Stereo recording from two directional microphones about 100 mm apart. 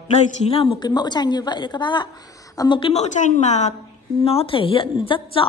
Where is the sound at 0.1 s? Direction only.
75° left (ahead or behind).